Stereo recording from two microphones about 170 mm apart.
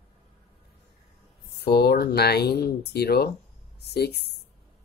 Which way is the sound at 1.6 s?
70° left (ahead or behind).